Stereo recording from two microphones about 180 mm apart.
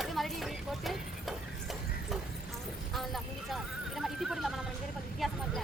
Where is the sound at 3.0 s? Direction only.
Centre (ahead or behind).